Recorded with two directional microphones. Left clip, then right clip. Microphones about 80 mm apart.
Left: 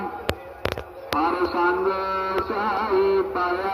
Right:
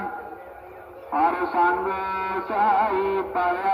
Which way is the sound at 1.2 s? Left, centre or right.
Right.